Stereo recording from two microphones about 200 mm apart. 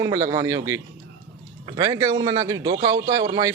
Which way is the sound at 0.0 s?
15° right (ahead or behind).